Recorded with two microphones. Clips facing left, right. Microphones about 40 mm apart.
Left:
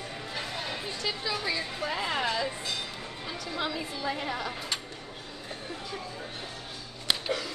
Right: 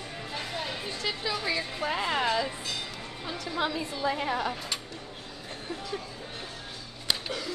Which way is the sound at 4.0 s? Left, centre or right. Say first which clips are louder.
Right 5 dB; centre.